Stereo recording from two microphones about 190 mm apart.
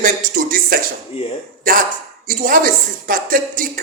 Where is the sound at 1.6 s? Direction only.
45° right (ahead or behind).